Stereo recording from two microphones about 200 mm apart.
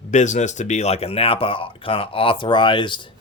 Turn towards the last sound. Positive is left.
turn(degrees=25)  # may be behind; listen again after turning